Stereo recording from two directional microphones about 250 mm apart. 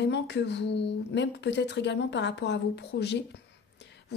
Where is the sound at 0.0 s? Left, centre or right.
Left.